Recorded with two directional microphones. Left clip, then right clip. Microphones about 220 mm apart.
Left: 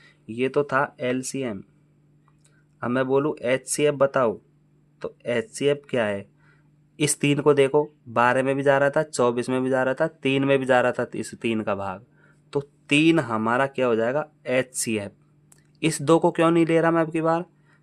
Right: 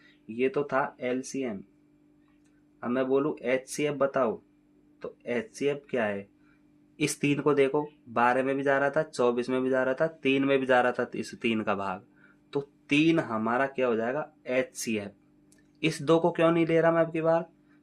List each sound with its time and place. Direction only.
0.3 s speech: 40° left (ahead or behind)
2.8 s speech: 45° left (ahead or behind)